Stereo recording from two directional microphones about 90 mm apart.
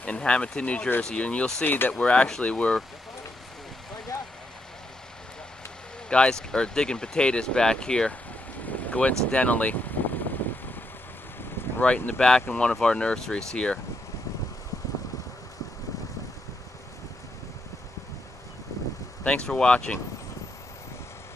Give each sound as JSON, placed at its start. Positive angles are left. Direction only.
{"t": 0.0, "sound": "speech", "side_deg": 15}
{"t": 6.0, "sound": "speech", "side_deg": 10}
{"t": 11.8, "sound": "speech", "side_deg": 10}
{"t": 19.2, "sound": "speech", "side_deg": 10}